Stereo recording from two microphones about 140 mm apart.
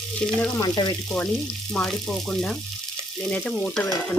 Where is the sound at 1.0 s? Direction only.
5° left (ahead or behind).